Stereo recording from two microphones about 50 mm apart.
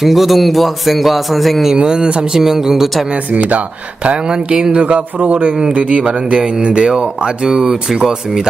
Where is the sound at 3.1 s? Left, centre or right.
Right.